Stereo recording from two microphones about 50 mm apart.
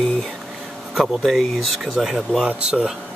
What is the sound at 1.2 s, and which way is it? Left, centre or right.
Speech, centre.